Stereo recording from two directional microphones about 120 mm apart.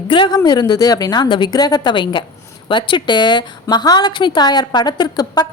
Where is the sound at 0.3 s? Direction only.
35° left (ahead or behind).